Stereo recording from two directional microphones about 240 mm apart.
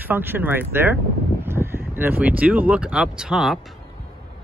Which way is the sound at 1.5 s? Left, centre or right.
Centre.